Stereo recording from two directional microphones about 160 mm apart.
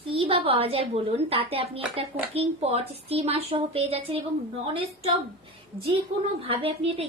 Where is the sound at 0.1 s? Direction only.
35° right (ahead or behind).